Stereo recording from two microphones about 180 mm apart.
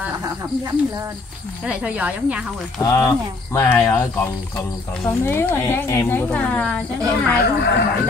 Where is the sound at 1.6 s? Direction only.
5° right (ahead or behind).